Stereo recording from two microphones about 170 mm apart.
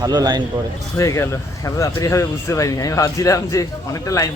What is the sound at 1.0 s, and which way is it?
Speech, 15° left (ahead or behind).